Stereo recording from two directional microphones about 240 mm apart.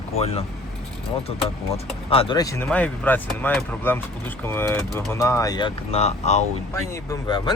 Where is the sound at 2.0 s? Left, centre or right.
Centre.